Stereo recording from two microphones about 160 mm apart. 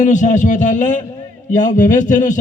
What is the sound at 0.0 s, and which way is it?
A man's voice, 50° left (ahead or behind).